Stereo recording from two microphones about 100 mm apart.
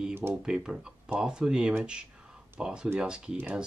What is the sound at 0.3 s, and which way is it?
Speech, 5° right (ahead or behind).